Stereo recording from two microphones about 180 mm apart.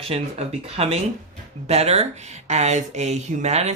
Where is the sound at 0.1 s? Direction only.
35° right (ahead or behind).